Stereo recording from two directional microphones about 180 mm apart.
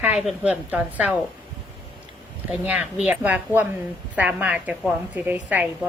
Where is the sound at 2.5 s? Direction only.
5° right (ahead or behind).